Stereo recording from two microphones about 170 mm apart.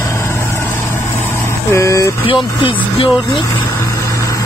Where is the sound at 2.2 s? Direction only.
30° left (ahead or behind).